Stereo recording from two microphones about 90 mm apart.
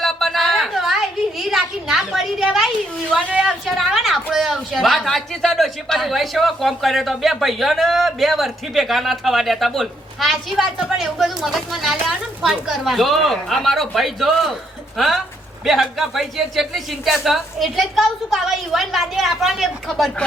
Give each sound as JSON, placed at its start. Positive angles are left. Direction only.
{"t": 0.0, "sound": "a sound", "side_deg": 0}
{"t": 3.2, "sound": "a woman's voice", "side_deg": -15}
{"t": 3.4, "sound": "a woman's voice", "side_deg": 0}